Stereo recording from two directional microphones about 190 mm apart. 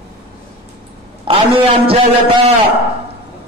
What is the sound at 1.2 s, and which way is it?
A man's voice, 30° right (ahead or behind).